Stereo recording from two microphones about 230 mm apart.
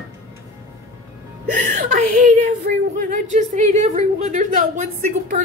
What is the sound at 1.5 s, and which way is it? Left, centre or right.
Speech, right.